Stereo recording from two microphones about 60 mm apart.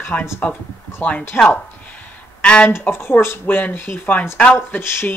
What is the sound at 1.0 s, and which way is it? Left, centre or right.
Speech, left.